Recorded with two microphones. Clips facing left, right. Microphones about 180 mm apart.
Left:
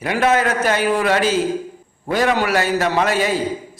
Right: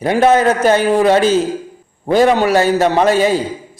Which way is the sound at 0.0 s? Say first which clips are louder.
Right 6 dB; 30° right (ahead or behind).